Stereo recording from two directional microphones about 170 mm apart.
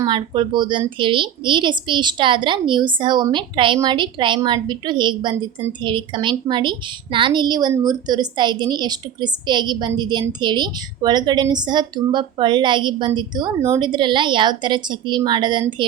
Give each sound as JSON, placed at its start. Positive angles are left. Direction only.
{"t": 0.0, "sound": "a woman's voice", "side_deg": -25}